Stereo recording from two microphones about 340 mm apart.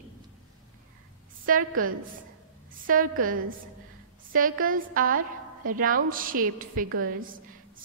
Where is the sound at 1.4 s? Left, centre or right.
Right.